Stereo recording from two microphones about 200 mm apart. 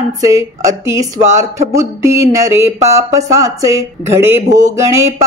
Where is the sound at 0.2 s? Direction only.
15° right (ahead or behind).